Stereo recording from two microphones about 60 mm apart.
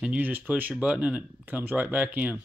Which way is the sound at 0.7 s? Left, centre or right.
Centre.